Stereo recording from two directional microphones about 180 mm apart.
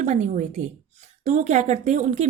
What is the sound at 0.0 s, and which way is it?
A woman's voice, 40° right (ahead or behind).